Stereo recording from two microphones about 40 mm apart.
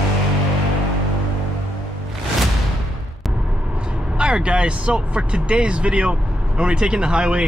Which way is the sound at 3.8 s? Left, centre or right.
Right.